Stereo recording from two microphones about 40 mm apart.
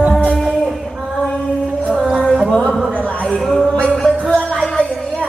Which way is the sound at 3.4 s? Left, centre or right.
Centre.